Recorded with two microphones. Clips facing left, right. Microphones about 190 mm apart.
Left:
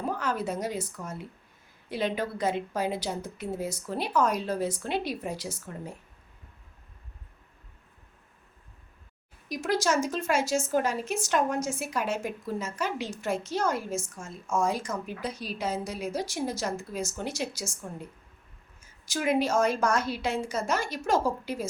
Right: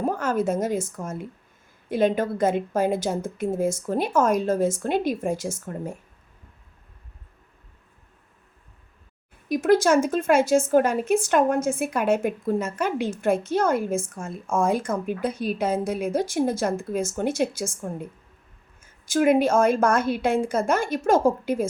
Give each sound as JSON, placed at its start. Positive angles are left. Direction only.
{"t": 0.0, "sound": "speech", "side_deg": -45}
{"t": 9.5, "sound": "speech", "side_deg": -55}